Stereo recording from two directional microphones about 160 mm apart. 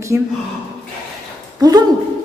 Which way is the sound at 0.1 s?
15° right (ahead or behind).